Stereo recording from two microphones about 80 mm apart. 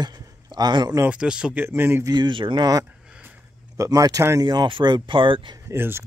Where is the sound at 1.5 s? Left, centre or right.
Right.